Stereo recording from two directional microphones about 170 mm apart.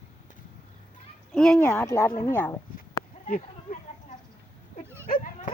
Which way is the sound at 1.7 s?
15° left (ahead or behind).